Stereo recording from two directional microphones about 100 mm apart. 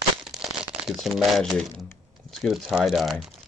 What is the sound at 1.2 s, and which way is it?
Speech, centre (ahead or behind).